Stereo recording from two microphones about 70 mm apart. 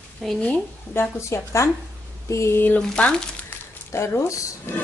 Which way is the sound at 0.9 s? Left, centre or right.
Left.